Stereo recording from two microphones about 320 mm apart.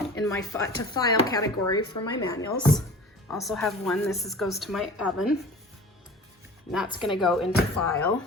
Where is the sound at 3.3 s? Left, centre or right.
Centre.